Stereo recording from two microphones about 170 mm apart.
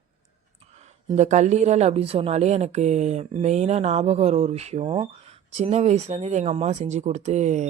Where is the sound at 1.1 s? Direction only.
45° right (ahead or behind).